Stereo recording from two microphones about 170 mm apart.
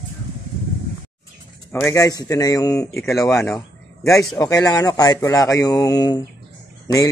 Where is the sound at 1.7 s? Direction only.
15° left (ahead or behind).